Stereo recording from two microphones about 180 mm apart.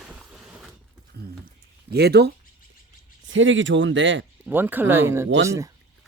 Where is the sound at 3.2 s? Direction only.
90° right.